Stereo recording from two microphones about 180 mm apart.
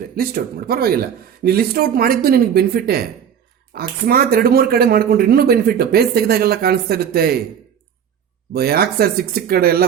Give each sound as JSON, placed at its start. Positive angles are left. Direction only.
{"t": 0.2, "sound": "speech", "side_deg": -55}
{"t": 8.5, "sound": "speech", "side_deg": -60}